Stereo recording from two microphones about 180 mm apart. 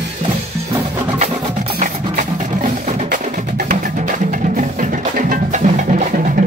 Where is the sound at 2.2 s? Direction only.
45° right (ahead or behind).